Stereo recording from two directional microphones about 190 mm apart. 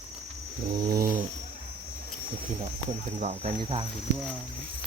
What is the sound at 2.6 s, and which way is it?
Speech, 35° right (ahead or behind).